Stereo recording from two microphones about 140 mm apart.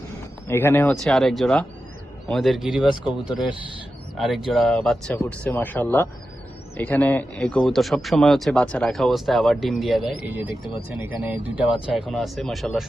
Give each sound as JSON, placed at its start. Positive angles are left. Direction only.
{"t": 0.4, "sound": "speech", "side_deg": 15}
{"t": 1.0, "sound": "a man's voice", "side_deg": 0}
{"t": 10.2, "sound": "a man's voice", "side_deg": -10}